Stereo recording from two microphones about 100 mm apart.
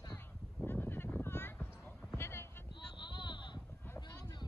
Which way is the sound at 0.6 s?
20° left (ahead or behind).